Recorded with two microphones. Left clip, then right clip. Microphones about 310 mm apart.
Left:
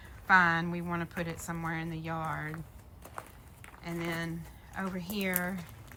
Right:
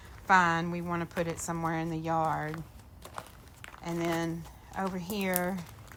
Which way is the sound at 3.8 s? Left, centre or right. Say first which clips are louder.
Right 5 dB; centre.